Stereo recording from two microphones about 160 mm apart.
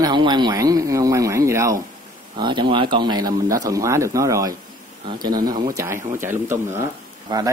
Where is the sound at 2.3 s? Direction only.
30° right (ahead or behind).